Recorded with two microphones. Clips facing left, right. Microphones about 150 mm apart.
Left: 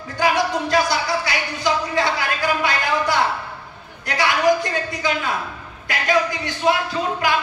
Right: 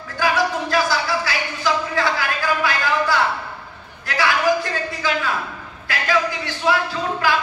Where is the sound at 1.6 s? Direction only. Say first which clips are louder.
Left 1 dB; 25° left (ahead or behind).